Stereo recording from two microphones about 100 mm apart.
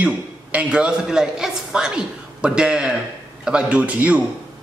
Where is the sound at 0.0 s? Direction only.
15° right (ahead or behind).